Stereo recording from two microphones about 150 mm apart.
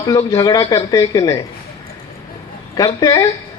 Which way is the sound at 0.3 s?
25° left (ahead or behind).